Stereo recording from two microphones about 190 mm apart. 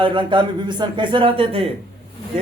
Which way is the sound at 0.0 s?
25° right (ahead or behind).